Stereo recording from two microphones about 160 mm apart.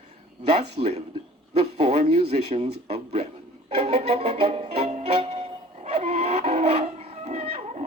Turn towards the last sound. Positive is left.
turn(degrees=-40)  # may be behind; listen again after turning